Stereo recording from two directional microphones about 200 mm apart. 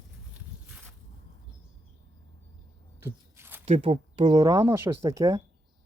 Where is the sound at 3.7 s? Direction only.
30° right (ahead or behind); by 5.4 s 15° right (ahead or behind).